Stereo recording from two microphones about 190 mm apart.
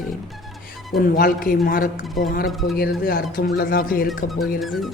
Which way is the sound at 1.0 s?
50° left (ahead or behind).